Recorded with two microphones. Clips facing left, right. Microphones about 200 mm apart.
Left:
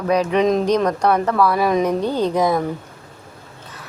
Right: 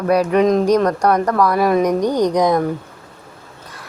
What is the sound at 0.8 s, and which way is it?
Speech, 10° left (ahead or behind).